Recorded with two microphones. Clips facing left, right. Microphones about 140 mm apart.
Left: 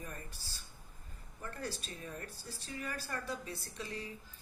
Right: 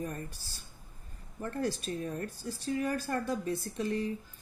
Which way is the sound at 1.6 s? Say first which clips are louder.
Right 10 dB; 55° right (ahead or behind).